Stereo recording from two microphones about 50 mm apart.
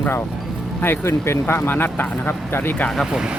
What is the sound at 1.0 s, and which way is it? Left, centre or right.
Speech, left.